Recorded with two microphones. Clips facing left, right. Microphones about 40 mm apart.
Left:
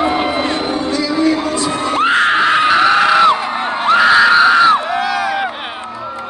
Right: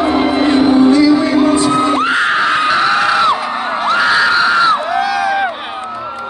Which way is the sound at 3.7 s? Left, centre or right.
Left.